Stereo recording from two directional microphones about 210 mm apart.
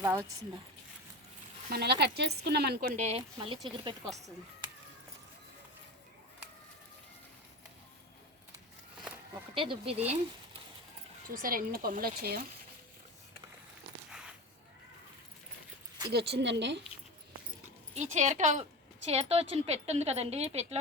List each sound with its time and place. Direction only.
0.0 s speech: 15° right (ahead or behind)
1.7 s speech: 50° right (ahead or behind); by 3.9 s 25° right (ahead or behind)
9.6 s speech: 25° right (ahead or behind)
11.3 s speech: 40° right (ahead or behind)
14.1 s a sound: 5° right (ahead or behind)
16.0 s a woman's voice: 50° right (ahead or behind)
17.9 s a woman's voice: 35° right (ahead or behind)